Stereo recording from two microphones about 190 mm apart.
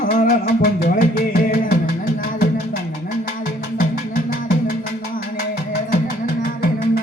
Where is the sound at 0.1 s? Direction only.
50° left (ahead or behind).